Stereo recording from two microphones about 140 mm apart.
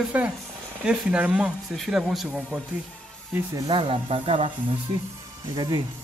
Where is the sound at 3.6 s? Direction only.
35° right (ahead or behind).